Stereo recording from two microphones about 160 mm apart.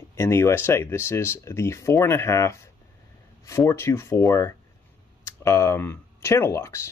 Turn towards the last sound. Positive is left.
turn(degrees=15)  # may be behind; listen again after turning